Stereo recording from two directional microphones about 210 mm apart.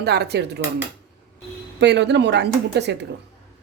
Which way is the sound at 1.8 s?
55° right (ahead or behind).